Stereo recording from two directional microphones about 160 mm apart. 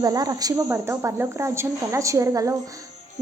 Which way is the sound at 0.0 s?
25° right (ahead or behind).